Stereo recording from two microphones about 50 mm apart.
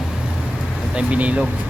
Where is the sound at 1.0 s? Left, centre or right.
Right.